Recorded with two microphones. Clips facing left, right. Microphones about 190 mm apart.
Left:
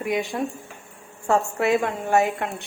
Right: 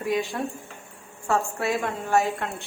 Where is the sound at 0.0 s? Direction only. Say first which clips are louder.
Left 1 dB; 20° left (ahead or behind).